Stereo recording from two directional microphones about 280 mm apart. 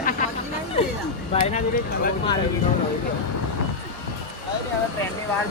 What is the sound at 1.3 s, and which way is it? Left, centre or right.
Speech, left.